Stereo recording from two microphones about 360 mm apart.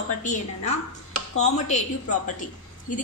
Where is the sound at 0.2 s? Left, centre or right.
Centre.